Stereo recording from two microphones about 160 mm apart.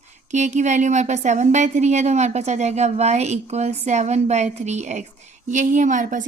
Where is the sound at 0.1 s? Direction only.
50° right (ahead or behind).